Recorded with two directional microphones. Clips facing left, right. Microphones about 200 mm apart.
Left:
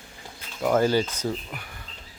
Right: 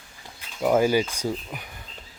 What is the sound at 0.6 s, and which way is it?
Speech, 10° right (ahead or behind).